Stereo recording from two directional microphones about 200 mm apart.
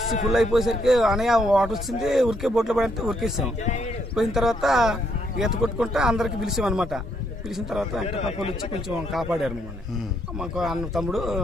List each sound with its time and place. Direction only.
0.3 s a man's voice: centre (ahead or behind)
8.1 s a man's voice: 30° left (ahead or behind)
9.1 s a man's voice: centre (ahead or behind)